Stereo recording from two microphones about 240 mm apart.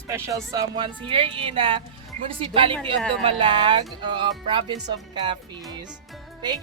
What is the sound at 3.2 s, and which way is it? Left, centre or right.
Speech, centre.